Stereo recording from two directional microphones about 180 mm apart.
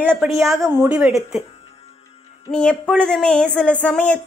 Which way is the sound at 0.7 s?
10° right (ahead or behind).